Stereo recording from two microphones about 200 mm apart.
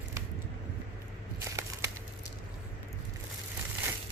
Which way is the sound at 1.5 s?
15° right (ahead or behind).